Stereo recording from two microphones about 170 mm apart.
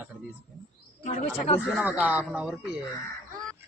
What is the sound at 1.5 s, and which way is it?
Speech, 5° right (ahead or behind).